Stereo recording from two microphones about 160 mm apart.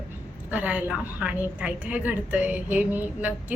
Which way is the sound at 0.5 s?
10° right (ahead or behind).